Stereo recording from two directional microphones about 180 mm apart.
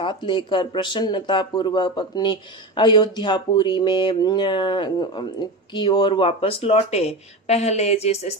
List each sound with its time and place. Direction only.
0.0 s speech: 25° left (ahead or behind)